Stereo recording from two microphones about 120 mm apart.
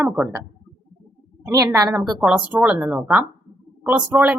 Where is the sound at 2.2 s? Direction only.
10° right (ahead or behind).